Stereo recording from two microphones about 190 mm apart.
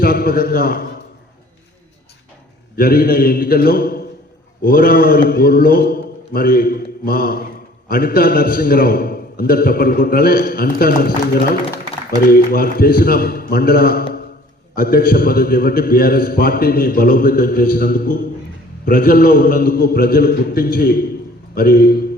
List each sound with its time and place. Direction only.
0.0 s a man's voice: 50° left (ahead or behind)
2.7 s a man's voice: 50° left (ahead or behind)
12.2 s a man's voice: 50° left (ahead or behind)